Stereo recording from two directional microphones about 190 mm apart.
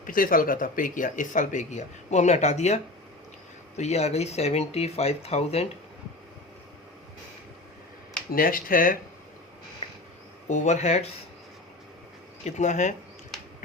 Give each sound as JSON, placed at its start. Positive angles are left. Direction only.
{"t": 0.0, "sound": "speech", "side_deg": 45}
{"t": 8.3, "sound": "speech", "side_deg": 50}
{"t": 9.8, "sound": "a sound", "side_deg": 30}
{"t": 10.5, "sound": "speech", "side_deg": 40}
{"t": 12.5, "sound": "speech", "side_deg": 40}